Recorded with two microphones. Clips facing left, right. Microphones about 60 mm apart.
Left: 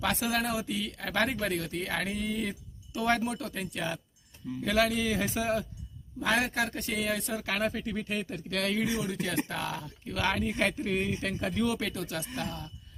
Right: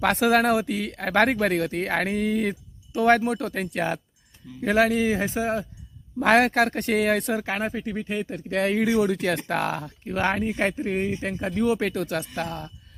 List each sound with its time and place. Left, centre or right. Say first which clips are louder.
0.0 s speech: right 10 dB; right
4.9 s a man's voice: right 6 dB; right
6.1 s speech: right 10 dB; right
7.7 s a man's voice: right 5 dB; right
8.6 s speech: right 9 dB; right
10.1 s a man's voice: right 5 dB; right
11.7 s speech: right 8 dB; right